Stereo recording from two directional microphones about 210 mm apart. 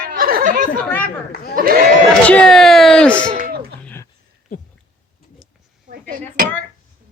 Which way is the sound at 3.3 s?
45° right (ahead or behind).